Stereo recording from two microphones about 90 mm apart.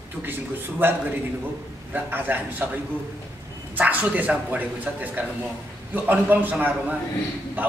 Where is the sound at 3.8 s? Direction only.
20° right (ahead or behind).